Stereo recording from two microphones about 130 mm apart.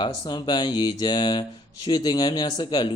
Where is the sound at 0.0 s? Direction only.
35° left (ahead or behind).